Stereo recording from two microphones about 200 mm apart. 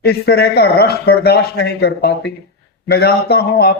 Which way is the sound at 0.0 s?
55° left (ahead or behind).